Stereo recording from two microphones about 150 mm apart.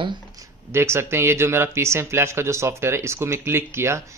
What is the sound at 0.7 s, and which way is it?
Speech, 15° right (ahead or behind).